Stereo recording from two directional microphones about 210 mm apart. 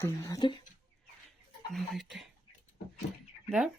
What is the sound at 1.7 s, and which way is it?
Speech, centre (ahead or behind).